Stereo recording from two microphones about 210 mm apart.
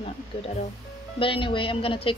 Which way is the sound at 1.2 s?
25° left (ahead or behind).